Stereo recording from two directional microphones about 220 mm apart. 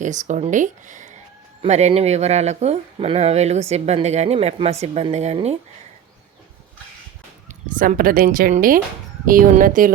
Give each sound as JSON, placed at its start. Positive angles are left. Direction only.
{"t": 0.0, "sound": "speech", "side_deg": -35}
{"t": 7.4, "sound": "speech", "side_deg": -35}